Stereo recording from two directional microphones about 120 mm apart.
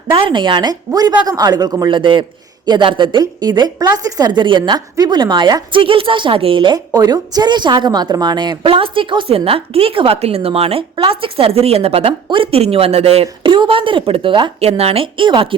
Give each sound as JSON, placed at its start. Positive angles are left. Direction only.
{"t": 0.1, "sound": "a woman's voice", "side_deg": -40}
{"t": 1.9, "sound": "a woman's voice", "side_deg": -45}
{"t": 13.4, "sound": "a woman's voice", "side_deg": -45}
{"t": 14.6, "sound": "a woman's voice", "side_deg": -60}